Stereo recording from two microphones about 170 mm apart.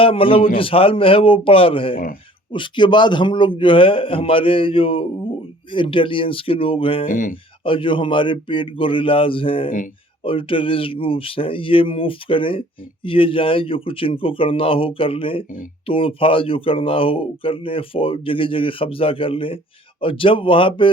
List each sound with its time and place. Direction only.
0.0 s speech: 30° left (ahead or behind)
7.1 s speech: 55° left (ahead or behind)
7.6 s speech: 30° left (ahead or behind)